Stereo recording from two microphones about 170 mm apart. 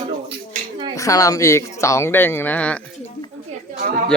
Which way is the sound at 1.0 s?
20° left (ahead or behind).